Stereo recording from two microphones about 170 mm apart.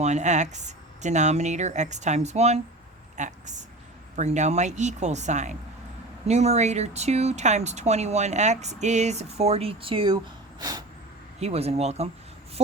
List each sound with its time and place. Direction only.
0.0 s a woman's voice: 45° right (ahead or behind)
10.6 s snort: 20° right (ahead or behind)
11.3 s speech: 40° right (ahead or behind)